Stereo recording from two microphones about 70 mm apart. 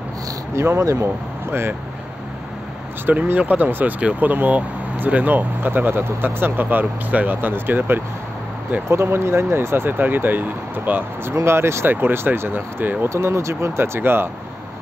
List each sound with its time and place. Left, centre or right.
0.6 s speech: right
3.1 s speech: right
11.3 s speech: right